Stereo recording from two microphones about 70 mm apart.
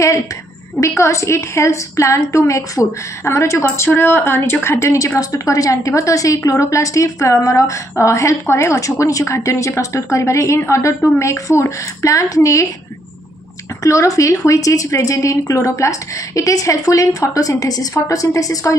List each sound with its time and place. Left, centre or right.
0.7 s a woman's voice: left
4.9 s a woman's voice: left
13.8 s speech: left